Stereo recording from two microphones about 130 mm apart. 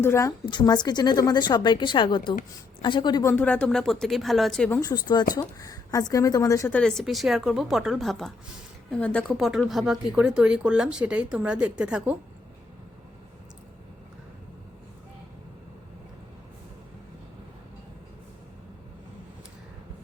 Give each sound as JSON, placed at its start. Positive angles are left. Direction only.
{"t": 0.0, "sound": "a woman's voice", "side_deg": 20}
{"t": 0.4, "sound": "a woman's voice", "side_deg": 35}
{"t": 3.2, "sound": "a woman's voice", "side_deg": 10}
{"t": 4.8, "sound": "a woman's voice", "side_deg": 35}
{"t": 6.7, "sound": "a woman's voice", "side_deg": 5}
{"t": 9.6, "sound": "speech", "side_deg": 0}